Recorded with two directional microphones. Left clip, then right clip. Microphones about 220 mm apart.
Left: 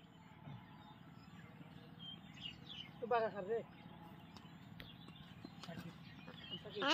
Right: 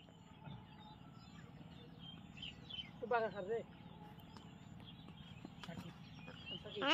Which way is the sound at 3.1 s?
25° left (ahead or behind).